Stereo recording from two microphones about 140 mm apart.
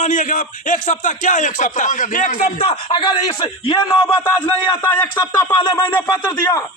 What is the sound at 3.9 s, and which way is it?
Music, 15° left (ahead or behind).